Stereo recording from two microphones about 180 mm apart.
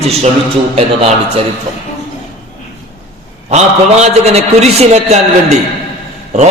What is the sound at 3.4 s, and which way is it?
A man's voice, 35° right (ahead or behind).